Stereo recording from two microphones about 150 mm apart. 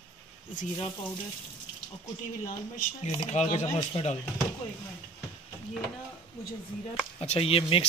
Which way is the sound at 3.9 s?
40° left (ahead or behind).